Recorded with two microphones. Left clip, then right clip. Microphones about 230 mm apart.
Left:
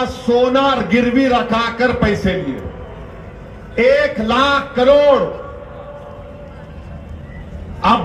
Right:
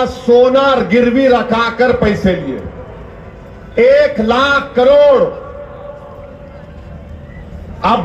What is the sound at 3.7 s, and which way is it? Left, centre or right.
A man's voice, left.